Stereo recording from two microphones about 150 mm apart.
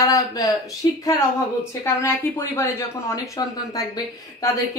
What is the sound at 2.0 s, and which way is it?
Speech, 15° left (ahead or behind).